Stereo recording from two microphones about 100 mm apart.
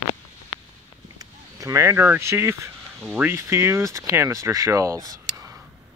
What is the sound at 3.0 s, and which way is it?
Speech, 10° right (ahead or behind).